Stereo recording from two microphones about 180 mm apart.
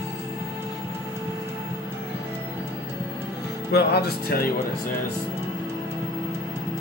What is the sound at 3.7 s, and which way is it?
Speech, 60° left (ahead or behind).